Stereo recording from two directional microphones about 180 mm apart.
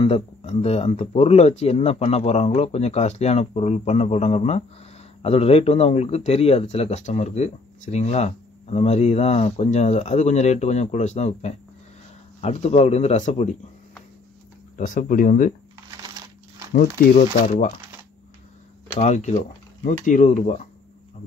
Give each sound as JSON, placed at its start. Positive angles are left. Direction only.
{"t": 0.0, "sound": "speech", "side_deg": 30}
{"t": 14.8, "sound": "speech", "side_deg": 45}
{"t": 16.7, "sound": "speech", "side_deg": 55}
{"t": 18.9, "sound": "speech", "side_deg": 40}